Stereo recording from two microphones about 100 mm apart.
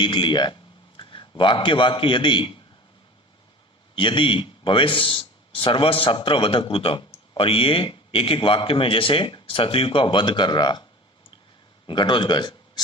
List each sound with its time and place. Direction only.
0.0 s a man's voice: 55° left (ahead or behind)
3.9 s a man's voice: 60° left (ahead or behind)
11.9 s a man's voice: 50° left (ahead or behind)